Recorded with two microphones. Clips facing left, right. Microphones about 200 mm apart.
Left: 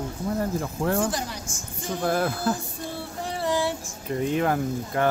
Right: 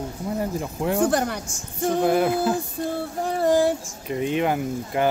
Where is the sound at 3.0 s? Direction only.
45° right (ahead or behind).